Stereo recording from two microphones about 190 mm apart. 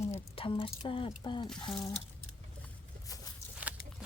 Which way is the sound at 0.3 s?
30° left (ahead or behind).